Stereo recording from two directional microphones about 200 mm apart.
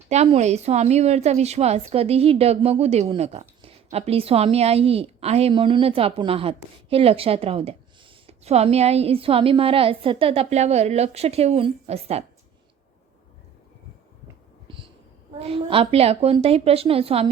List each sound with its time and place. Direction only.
0.1 s a woman's voice: 35° right (ahead or behind)
15.4 s a woman's voice: 30° right (ahead or behind)